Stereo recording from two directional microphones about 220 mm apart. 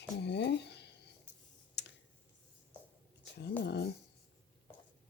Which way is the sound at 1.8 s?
50° left (ahead or behind).